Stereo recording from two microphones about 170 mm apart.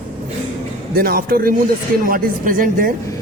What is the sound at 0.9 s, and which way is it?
Speech, 60° right (ahead or behind).